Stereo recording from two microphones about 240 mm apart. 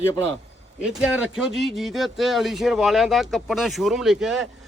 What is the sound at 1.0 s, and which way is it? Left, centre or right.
Speech, centre.